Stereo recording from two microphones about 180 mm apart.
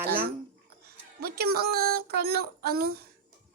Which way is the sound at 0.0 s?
55° right (ahead or behind).